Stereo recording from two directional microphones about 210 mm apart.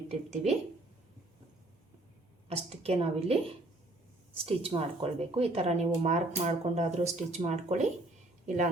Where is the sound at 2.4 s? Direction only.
30° right (ahead or behind).